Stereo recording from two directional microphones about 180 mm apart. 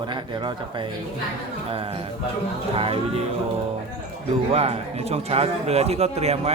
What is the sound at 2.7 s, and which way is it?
Speech, 30° right (ahead or behind).